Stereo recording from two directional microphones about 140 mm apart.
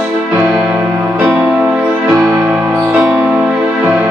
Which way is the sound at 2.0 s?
25° right (ahead or behind).